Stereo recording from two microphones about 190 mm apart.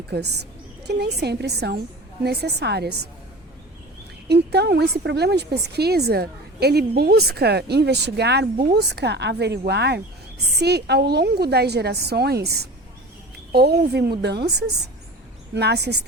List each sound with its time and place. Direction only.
0.1 s a woman's voice: 60° right (ahead or behind)
4.5 s a woman's voice: 60° right (ahead or behind)